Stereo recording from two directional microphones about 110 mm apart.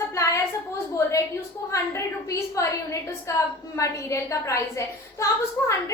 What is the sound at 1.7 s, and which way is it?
A woman's voice, 25° left (ahead or behind).